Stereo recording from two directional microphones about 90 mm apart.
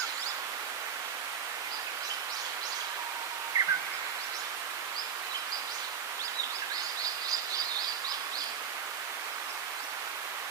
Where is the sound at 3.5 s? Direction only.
35° right (ahead or behind).